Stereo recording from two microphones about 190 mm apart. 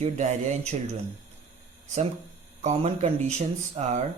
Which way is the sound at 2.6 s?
35° right (ahead or behind).